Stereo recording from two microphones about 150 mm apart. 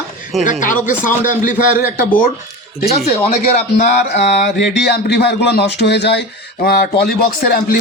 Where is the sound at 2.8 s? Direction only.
45° left (ahead or behind).